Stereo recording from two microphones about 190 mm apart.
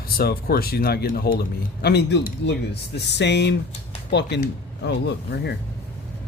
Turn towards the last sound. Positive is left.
turn(degrees=60)  # may be behind; listen again after turning